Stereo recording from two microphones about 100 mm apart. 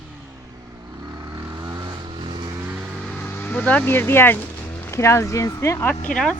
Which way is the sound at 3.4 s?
15° left (ahead or behind).